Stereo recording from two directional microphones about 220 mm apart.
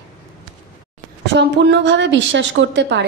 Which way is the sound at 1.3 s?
50° right (ahead or behind).